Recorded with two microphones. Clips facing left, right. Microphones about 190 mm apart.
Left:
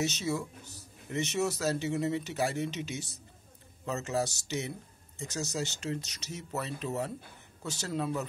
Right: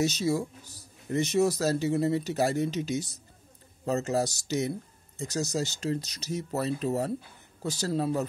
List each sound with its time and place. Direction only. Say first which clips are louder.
0.0 s speech: right 5 dB; 35° right (ahead or behind)